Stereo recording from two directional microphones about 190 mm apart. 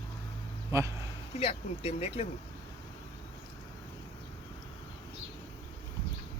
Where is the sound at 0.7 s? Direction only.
15° right (ahead or behind).